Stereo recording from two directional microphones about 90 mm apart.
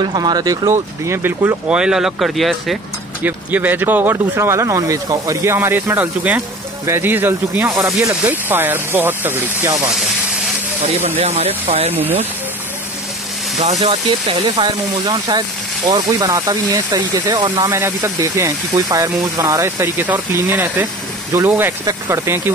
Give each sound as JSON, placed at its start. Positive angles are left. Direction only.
{"t": 0.0, "sound": "speech", "side_deg": -55}
{"t": 0.7, "sound": "speech", "side_deg": -30}
{"t": 1.7, "sound": "speech", "side_deg": -10}
{"t": 3.3, "sound": "speech", "side_deg": -20}
{"t": 7.6, "sound": "speech", "side_deg": -40}
{"t": 8.1, "sound": "speech", "side_deg": -20}
{"t": 11.1, "sound": "speech", "side_deg": -90}
{"t": 11.9, "sound": "speech", "side_deg": -20}
{"t": 14.3, "sound": "speech", "side_deg": -55}
{"t": 17.6, "sound": "speech", "side_deg": -30}
{"t": 21.3, "sound": "speech", "side_deg": -35}